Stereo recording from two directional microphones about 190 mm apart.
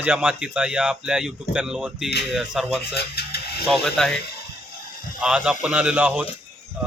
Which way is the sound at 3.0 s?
55° left (ahead or behind).